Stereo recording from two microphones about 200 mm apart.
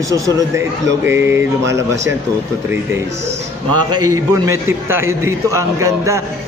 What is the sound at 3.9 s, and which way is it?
A man's voice, 20° right (ahead or behind).